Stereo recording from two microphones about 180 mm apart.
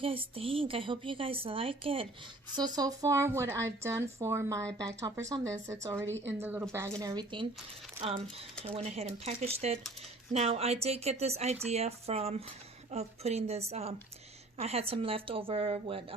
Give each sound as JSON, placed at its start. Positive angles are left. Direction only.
{"t": 0.0, "sound": "a woman's voice", "side_deg": -30}
{"t": 8.6, "sound": "a woman's voice", "side_deg": -35}